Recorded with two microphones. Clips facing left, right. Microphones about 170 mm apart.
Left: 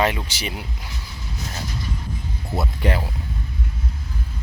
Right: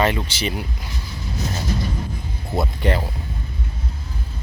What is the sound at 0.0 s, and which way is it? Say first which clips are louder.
Speech: right 2 dB; 10° left (ahead or behind).